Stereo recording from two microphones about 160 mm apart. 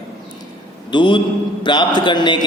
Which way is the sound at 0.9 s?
30° left (ahead or behind).